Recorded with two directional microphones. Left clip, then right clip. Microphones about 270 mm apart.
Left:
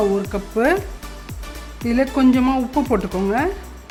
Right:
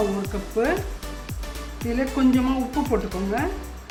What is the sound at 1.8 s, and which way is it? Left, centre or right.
A woman's voice, left.